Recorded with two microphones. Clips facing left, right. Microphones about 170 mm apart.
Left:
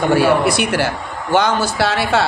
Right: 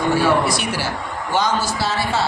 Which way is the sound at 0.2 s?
60° left (ahead or behind).